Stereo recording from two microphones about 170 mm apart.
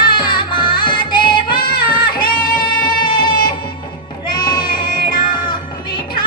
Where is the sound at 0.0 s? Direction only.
25° left (ahead or behind).